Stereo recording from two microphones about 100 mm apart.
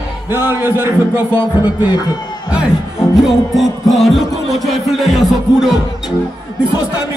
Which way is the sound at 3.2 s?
Centre (ahead or behind).